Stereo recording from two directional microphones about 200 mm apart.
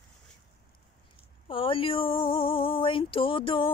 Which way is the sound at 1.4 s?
25° left (ahead or behind).